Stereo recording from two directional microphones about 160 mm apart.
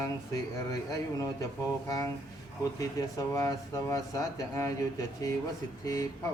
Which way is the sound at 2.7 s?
20° left (ahead or behind).